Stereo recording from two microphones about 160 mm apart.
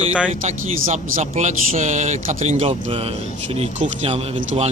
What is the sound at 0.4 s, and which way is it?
Speech, 50° right (ahead or behind).